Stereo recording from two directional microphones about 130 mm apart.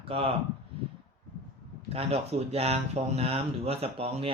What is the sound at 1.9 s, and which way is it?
Speech, 50° right (ahead or behind).